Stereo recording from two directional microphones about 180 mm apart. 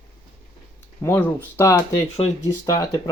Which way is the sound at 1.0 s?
10° left (ahead or behind).